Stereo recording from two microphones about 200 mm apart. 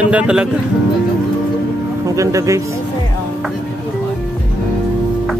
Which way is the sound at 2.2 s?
15° right (ahead or behind).